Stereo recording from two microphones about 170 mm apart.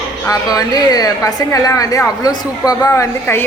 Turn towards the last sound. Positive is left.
turn(degrees=15)  # may be behind; listen again after turning